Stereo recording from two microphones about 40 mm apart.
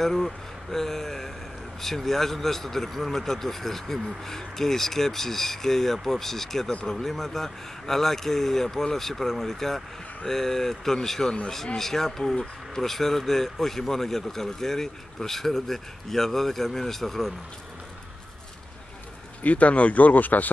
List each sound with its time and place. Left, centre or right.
0.0 s speech: centre
19.4 s speech: left